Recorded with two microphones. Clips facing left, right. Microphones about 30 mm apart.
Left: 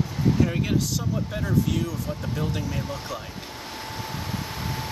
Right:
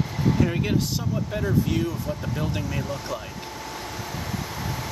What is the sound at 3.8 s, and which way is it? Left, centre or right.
Vehicle, left.